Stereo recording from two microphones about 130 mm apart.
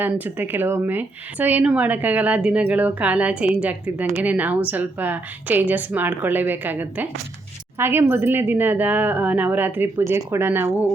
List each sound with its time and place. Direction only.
0.0 s speech: 15° right (ahead or behind)